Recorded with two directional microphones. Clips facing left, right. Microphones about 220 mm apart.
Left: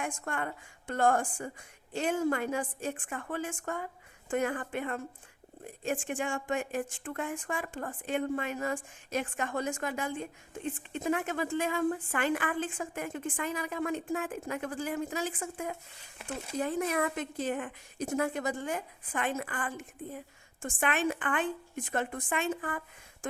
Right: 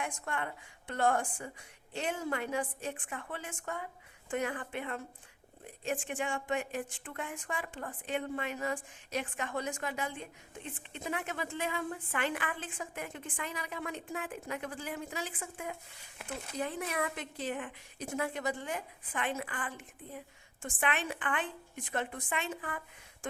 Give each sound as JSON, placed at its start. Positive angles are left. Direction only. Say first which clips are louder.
{"t": 0.0, "sound": "a woman's voice", "louder": "left 2 dB", "side_deg": 45}